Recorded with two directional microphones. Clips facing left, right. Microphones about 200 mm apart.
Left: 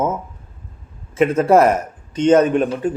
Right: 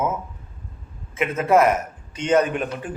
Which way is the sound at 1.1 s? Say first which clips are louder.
Left 5 dB; 35° left (ahead or behind).